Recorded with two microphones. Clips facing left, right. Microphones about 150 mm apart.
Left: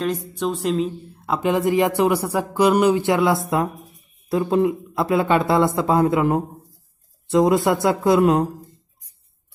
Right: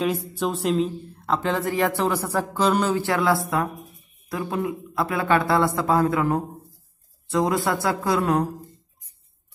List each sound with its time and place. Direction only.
0.3 s speech: centre (ahead or behind); by 8.5 s 20° left (ahead or behind)